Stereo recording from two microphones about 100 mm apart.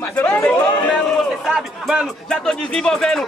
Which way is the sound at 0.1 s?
20° left (ahead or behind).